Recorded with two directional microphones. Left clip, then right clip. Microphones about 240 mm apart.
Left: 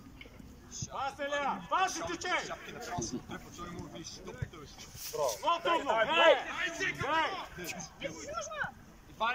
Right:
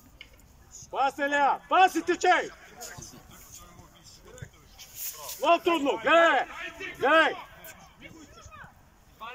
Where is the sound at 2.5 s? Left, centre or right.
Left.